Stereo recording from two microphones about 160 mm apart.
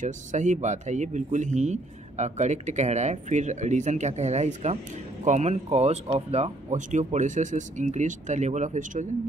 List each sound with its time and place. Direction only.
0.0 s speech: 50° right (ahead or behind)